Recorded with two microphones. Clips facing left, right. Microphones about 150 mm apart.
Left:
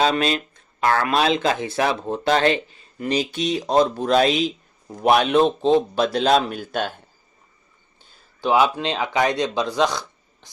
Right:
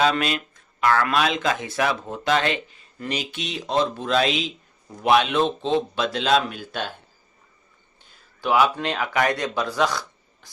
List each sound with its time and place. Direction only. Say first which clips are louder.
0.0 s speech: left 2 dB; 30° left (ahead or behind)
8.4 s speech: left 2 dB; 25° left (ahead or behind)